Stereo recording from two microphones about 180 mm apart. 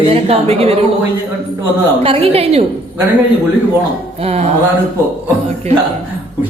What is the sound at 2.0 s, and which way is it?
Speech, 35° right (ahead or behind).